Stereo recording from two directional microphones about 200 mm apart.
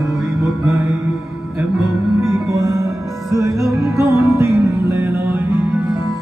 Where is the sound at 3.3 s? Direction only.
Centre (ahead or behind).